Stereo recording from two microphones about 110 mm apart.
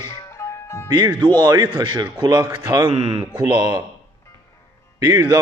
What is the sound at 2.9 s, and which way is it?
Speech, 60° right (ahead or behind).